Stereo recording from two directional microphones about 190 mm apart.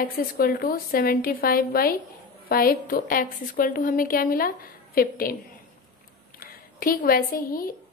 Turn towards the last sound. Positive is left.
turn(degrees=50)  # may be behind; listen again after turning